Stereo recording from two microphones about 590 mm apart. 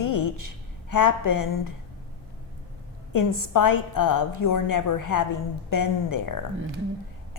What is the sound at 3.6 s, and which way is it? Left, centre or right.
A woman's voice, left.